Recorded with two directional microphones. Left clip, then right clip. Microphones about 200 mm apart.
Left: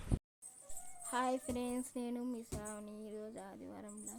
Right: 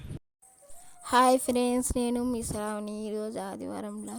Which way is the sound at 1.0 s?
50° right (ahead or behind).